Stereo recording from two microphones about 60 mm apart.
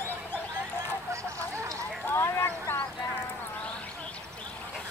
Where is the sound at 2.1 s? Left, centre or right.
Left.